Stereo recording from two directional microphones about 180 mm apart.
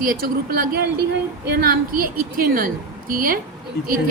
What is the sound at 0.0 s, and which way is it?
A woman's voice, 55° right (ahead or behind).